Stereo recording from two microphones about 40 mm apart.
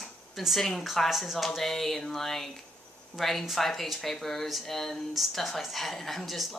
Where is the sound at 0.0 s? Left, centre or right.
Centre.